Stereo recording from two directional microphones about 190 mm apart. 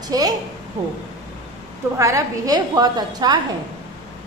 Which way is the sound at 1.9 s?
15° right (ahead or behind).